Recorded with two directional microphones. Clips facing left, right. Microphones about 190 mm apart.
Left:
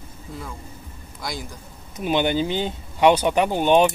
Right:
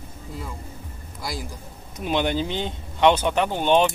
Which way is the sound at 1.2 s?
5° right (ahead or behind).